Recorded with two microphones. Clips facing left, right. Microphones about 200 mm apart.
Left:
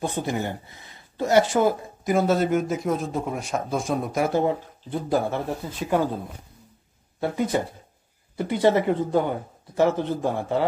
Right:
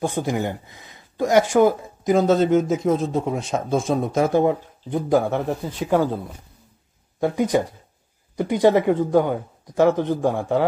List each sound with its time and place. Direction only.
0.0 s speech: 15° right (ahead or behind)
7.2 s speech: 15° right (ahead or behind)